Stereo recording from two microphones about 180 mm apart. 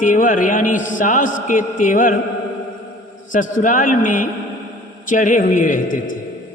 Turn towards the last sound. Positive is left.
turn(degrees=45)  # may be behind; listen again after turning